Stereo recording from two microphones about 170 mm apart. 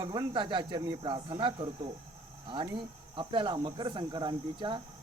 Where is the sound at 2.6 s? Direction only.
30° right (ahead or behind).